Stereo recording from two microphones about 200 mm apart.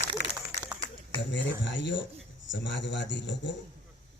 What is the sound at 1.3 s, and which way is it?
Speech, 65° left (ahead or behind).